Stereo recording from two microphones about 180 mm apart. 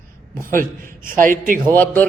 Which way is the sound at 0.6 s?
50° right (ahead or behind).